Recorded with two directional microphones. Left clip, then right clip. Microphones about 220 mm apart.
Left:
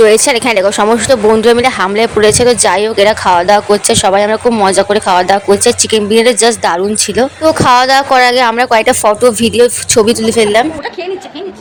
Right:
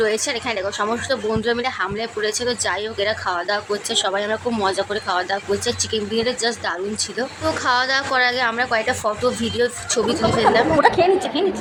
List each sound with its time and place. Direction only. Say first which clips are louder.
0.0 s speech: left 14 dB; 35° left (ahead or behind)